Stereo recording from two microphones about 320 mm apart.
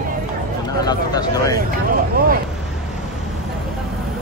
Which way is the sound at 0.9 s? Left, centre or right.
Centre.